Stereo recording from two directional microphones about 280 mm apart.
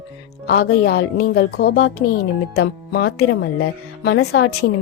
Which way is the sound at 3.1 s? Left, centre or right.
Left.